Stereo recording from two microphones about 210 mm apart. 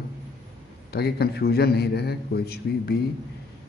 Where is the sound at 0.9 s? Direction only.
50° left (ahead or behind).